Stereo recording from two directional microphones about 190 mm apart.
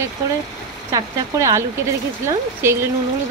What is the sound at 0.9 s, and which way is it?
Speech, 20° right (ahead or behind).